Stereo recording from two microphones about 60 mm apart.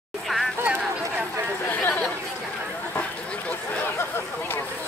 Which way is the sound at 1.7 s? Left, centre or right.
Left.